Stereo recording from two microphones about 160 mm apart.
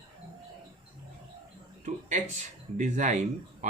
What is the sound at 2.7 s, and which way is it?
Speech, 50° right (ahead or behind).